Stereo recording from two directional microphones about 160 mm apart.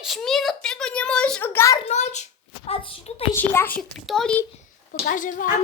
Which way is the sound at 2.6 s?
35° left (ahead or behind).